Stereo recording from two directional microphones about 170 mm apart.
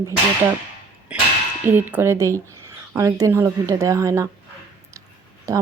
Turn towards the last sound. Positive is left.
turn(degrees=-20)  # may be behind; listen again after turning